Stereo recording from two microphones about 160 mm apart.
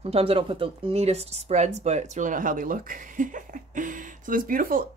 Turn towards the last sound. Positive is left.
turn(degrees=-60)  # may be behind; listen again after turning